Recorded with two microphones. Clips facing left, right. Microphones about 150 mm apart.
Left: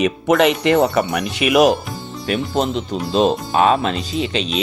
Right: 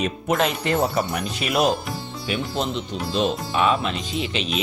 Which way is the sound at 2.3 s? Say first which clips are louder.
Left 6 dB; 45° left (ahead or behind).